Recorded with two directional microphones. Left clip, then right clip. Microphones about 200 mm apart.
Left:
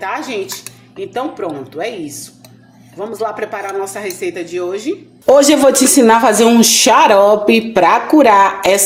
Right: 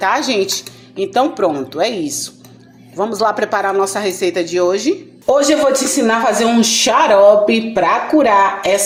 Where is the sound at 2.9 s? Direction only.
20° right (ahead or behind).